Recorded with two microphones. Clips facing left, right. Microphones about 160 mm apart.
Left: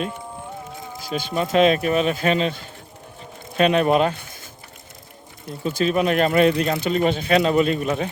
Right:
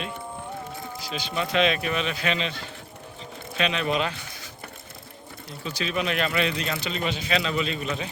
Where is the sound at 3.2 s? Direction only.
50° left (ahead or behind).